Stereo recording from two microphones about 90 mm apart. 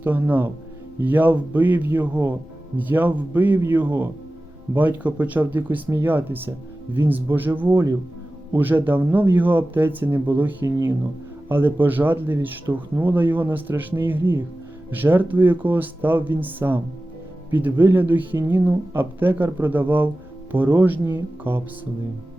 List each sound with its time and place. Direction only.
0.0 s speech: 20° right (ahead or behind)